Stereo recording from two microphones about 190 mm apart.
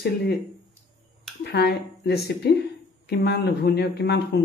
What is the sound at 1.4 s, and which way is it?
Speech, 60° left (ahead or behind).